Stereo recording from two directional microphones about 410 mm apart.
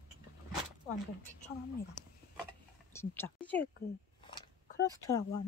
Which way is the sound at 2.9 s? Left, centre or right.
Centre.